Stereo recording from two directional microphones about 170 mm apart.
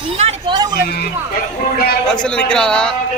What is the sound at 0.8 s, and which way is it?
Speech, 70° left (ahead or behind).